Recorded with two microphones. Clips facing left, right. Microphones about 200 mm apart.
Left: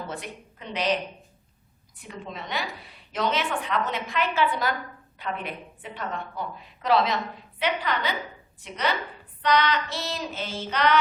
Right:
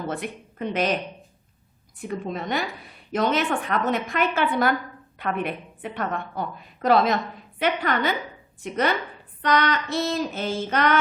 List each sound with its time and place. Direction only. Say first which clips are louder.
0.1 s a woman's voice: right 6 dB; 55° right (ahead or behind)
2.0 s a woman's voice: right 8 dB; 50° right (ahead or behind)